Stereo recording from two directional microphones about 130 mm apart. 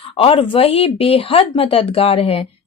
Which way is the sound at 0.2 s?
45° left (ahead or behind).